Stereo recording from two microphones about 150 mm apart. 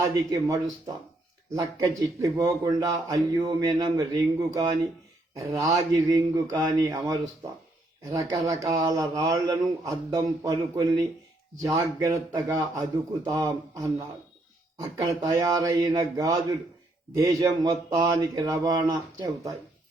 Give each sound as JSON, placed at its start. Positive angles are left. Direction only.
{"t": 0.0, "sound": "speech", "side_deg": -20}
{"t": 8.7, "sound": "speech", "side_deg": -25}